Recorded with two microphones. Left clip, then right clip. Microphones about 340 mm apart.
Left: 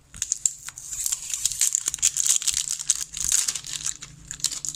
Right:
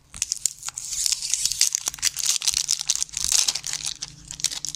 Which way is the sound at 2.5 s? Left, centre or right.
Centre.